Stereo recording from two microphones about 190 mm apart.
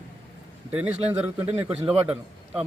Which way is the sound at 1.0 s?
10° right (ahead or behind).